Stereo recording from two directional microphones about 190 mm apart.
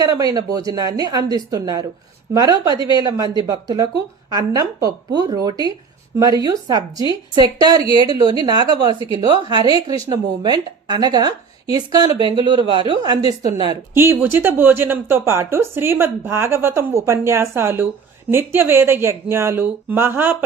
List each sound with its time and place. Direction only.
0.0 s speech: 20° right (ahead or behind)